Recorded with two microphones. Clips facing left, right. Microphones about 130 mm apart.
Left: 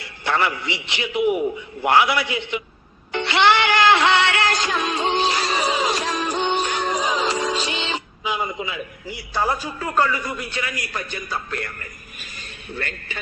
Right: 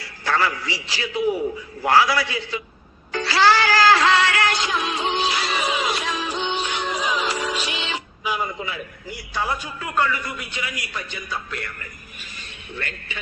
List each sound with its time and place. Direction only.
0.0 s a man's voice: 25° left (ahead or behind)
3.1 s music: 25° left (ahead or behind)
4.5 s music: 40° left (ahead or behind)
6.3 s music: 50° left (ahead or behind); by 8.8 s 20° left (ahead or behind)
9.3 s a man's voice: 35° left (ahead or behind)